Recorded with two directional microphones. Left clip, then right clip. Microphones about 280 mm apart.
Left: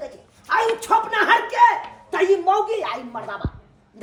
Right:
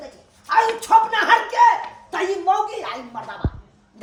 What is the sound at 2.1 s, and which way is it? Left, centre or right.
A woman's voice, centre.